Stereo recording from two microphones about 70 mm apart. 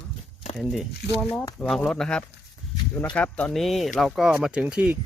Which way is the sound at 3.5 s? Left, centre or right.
Centre.